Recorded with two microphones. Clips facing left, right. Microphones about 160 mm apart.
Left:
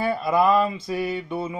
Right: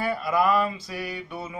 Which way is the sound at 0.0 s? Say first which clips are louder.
Left 3 dB; 25° left (ahead or behind).